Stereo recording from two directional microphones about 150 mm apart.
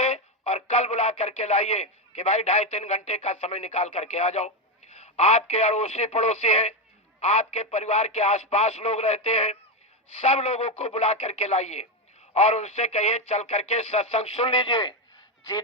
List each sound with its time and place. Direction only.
0.0 s radio: 40° left (ahead or behind)
3.4 s a man's voice: 45° left (ahead or behind)